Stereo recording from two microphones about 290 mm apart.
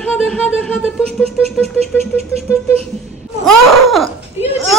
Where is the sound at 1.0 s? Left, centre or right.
Right.